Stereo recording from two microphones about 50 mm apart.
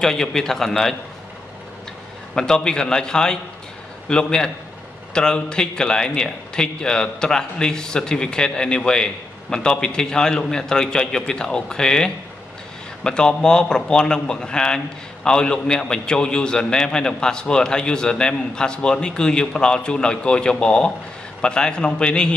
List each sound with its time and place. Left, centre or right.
0.0 s speech: centre
2.3 s speech: centre